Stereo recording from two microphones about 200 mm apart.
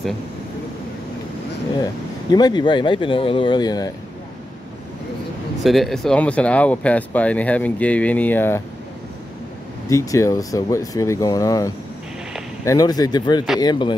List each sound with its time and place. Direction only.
2.3 s speech: 20° left (ahead or behind)
5.6 s speech: centre (ahead or behind)
9.8 s speech: 15° left (ahead or behind)